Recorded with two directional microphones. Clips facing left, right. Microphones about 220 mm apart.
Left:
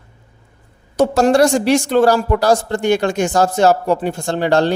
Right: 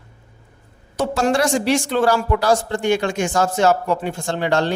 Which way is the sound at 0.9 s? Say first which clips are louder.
Left 6 dB; 40° left (ahead or behind).